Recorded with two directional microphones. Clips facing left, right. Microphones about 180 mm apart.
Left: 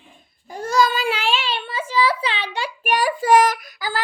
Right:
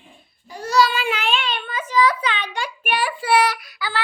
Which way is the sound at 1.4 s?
30° left (ahead or behind).